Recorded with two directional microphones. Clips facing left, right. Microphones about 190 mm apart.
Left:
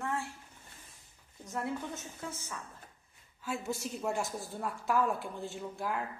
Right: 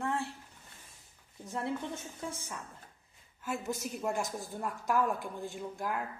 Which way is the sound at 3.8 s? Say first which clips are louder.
Even; 5° right (ahead or behind).